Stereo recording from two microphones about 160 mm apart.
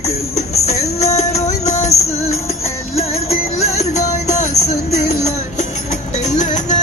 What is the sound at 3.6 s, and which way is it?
Music, 45° left (ahead or behind).